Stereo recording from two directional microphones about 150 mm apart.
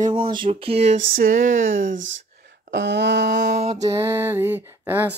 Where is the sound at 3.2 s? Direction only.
90° right.